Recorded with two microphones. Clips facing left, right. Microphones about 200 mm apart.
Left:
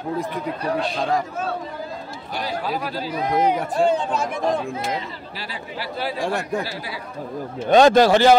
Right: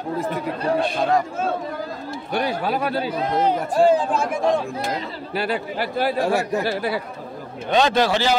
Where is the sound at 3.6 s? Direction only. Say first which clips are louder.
Right 3 dB; 5° right (ahead or behind).